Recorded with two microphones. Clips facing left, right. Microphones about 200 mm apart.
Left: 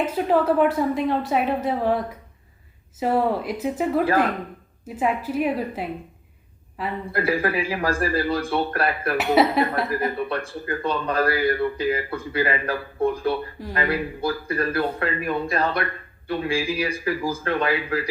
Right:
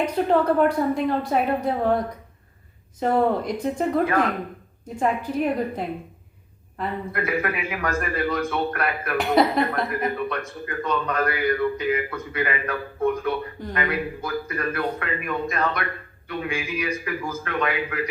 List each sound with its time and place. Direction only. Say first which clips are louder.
0.0 s speech: even; 5° left (ahead or behind)
4.0 s a man's voice: left 2 dB; 30° left (ahead or behind)
4.9 s speech: even; 5° left (ahead or behind)
7.1 s a man's voice: left 5 dB; 30° left (ahead or behind)
9.1 s speech: even; 5° left (ahead or behind)
9.9 s a man's voice: left 1 dB; 30° left (ahead or behind)